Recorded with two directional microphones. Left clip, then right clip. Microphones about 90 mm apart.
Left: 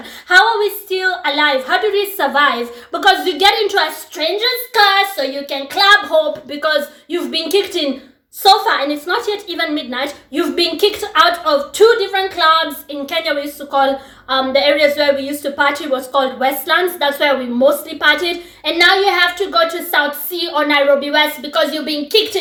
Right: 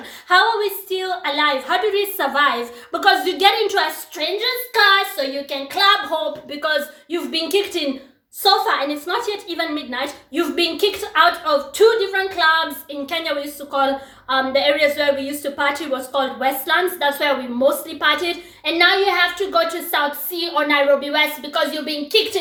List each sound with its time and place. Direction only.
0.3 s a woman's voice: 30° left (ahead or behind)
19.5 s a woman's voice: 25° left (ahead or behind); by 22.2 s 40° left (ahead or behind)